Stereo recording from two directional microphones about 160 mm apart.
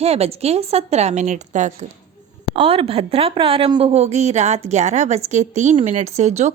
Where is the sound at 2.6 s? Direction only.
35° right (ahead or behind).